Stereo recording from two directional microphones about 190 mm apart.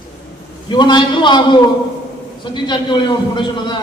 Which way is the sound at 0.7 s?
25° left (ahead or behind).